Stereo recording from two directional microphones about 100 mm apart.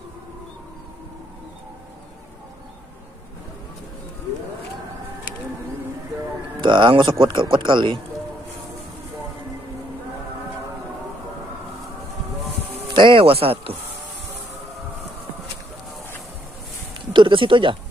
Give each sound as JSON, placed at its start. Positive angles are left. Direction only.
{"t": 6.6, "sound": "speech", "side_deg": -50}
{"t": 12.9, "sound": "music", "side_deg": -60}
{"t": 17.0, "sound": "speech", "side_deg": -55}